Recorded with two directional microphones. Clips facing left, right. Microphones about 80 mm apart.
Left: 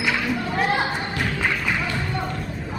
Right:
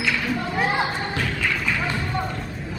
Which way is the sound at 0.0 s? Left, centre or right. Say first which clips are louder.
Left 1 dB; left.